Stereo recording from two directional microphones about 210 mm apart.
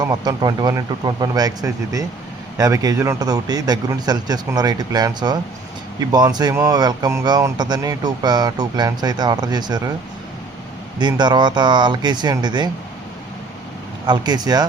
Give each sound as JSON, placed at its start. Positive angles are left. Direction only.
{"t": 0.0, "sound": "speech", "side_deg": -20}
{"t": 10.9, "sound": "speech", "side_deg": -20}
{"t": 14.1, "sound": "speech", "side_deg": -20}